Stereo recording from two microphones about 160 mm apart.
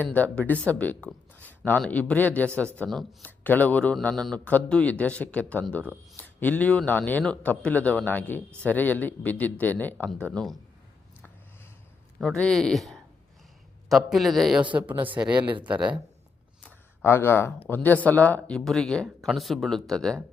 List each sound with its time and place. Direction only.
0.0 s a man's voice: 10° left (ahead or behind)
12.2 s speech: 5° left (ahead or behind)
15.3 s speech: 30° right (ahead or behind)
16.6 s a sound: 15° left (ahead or behind)
17.7 s speech: 10° left (ahead or behind)